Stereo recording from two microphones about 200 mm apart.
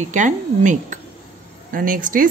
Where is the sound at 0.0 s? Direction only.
35° right (ahead or behind).